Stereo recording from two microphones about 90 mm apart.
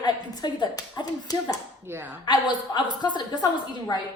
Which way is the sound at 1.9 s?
25° right (ahead or behind).